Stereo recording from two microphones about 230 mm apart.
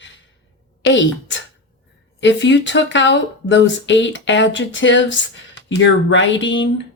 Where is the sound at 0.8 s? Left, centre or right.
Left.